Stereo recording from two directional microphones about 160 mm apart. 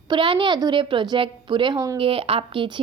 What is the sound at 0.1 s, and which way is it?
A woman's voice, 30° right (ahead or behind).